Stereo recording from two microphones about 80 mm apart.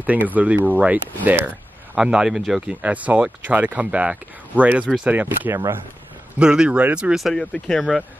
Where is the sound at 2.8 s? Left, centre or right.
Centre.